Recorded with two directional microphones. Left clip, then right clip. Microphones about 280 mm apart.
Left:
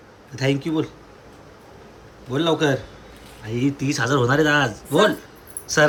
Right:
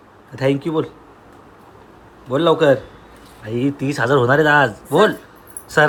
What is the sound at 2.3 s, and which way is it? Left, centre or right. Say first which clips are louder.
Speech: right 6 dB; centre.